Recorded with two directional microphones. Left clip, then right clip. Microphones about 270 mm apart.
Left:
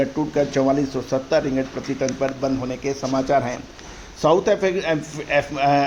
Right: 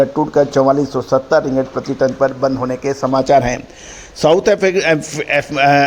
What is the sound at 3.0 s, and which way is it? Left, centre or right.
A man's voice, right.